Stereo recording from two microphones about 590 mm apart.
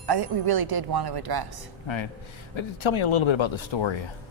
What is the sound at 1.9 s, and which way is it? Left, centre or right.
Speech, left.